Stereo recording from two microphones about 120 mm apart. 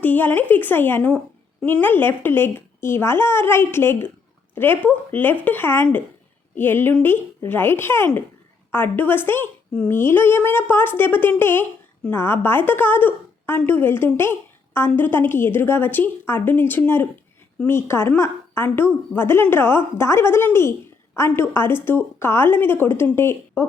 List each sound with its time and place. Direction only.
0.0 s a woman's voice: 15° left (ahead or behind)